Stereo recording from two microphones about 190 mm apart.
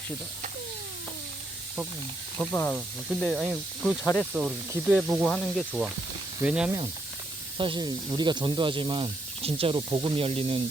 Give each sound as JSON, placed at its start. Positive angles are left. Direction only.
{"t": 2.4, "sound": "speech", "side_deg": 10}
{"t": 4.9, "sound": "speech", "side_deg": -5}
{"t": 7.6, "sound": "speech", "side_deg": -25}